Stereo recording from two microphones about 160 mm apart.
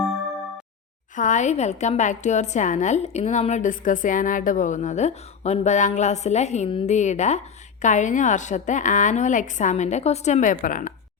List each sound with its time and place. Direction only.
1.1 s a woman's voice: 50° left (ahead or behind)